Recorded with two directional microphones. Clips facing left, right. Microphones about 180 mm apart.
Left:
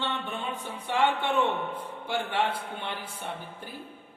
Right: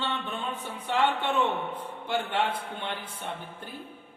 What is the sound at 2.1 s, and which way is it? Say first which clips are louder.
Speech: even; 10° left (ahead or behind).